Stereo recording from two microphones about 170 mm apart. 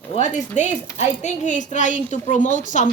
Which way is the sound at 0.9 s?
45° left (ahead or behind).